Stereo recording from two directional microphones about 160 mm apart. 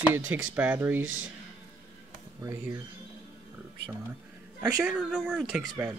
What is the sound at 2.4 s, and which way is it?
Speech, 20° right (ahead or behind).